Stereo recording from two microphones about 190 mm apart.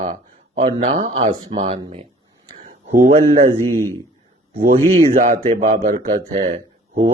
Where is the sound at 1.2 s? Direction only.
40° right (ahead or behind).